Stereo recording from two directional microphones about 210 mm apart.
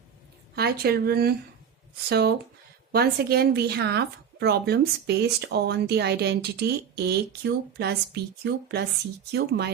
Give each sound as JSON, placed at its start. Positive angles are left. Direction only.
{"t": 0.5, "sound": "speech", "side_deg": -50}